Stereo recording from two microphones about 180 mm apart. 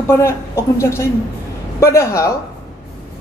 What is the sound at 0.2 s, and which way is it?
A woman's voice, 15° left (ahead or behind).